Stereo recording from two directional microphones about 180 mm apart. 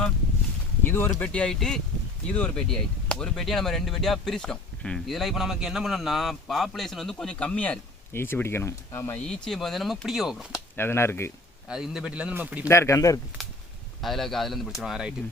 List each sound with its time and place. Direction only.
0.9 s speech: 10° left (ahead or behind)
10.8 s speech: 10° left (ahead or behind)
11.7 s a man's voice: 5° right (ahead or behind)
12.6 s speech: 15° left (ahead or behind)
14.0 s speech: centre (ahead or behind)